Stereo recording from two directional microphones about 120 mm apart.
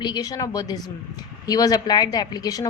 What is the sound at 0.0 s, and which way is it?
A woman's voice, 35° left (ahead or behind).